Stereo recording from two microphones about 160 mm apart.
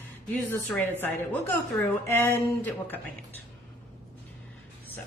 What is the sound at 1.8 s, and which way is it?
A woman's voice, 15° left (ahead or behind).